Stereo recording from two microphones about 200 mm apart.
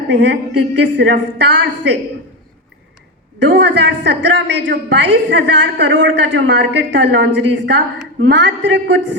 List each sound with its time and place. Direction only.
0.1 s a woman's voice: 60° right (ahead or behind)
3.3 s a woman's voice: 60° right (ahead or behind)